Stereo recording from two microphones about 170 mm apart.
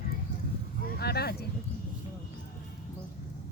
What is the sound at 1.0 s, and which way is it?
Speech, 70° left (ahead or behind).